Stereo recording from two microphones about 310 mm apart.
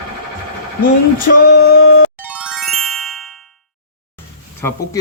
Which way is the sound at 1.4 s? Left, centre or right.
Left.